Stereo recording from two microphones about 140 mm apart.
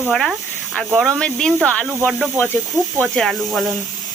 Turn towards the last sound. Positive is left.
turn(degrees=0)  # may be behind; listen again after turning